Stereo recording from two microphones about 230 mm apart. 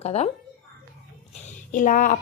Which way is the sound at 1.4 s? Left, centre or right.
Left.